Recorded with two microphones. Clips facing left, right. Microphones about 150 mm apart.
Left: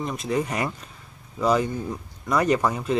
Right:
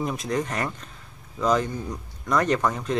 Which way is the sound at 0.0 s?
Centre (ahead or behind).